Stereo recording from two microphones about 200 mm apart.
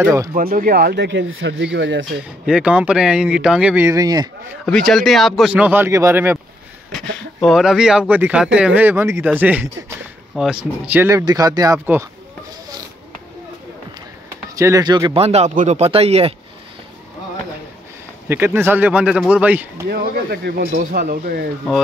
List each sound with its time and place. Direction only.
0.0 s speech: 15° right (ahead or behind)
0.3 s speech: 45° right (ahead or behind); by 2.0 s 60° right (ahead or behind)
2.4 s speech: 5° right (ahead or behind)
4.6 s speech: 5° left (ahead or behind)
6.9 s speech: centre (ahead or behind)
14.6 s speech: 20° right (ahead or behind)
18.3 s speech: 10° right (ahead or behind)
19.9 s speech: 55° right (ahead or behind)